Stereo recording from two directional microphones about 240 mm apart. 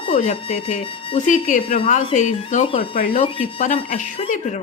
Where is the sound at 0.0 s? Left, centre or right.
Left.